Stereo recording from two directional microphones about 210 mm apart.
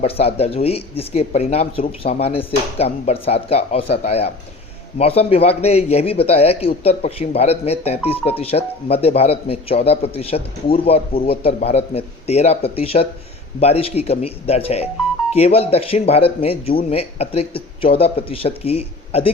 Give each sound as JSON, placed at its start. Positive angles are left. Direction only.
{"t": 0.0, "sound": "speech", "side_deg": 30}